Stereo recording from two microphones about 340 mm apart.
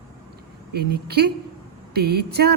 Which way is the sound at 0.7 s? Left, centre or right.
Right.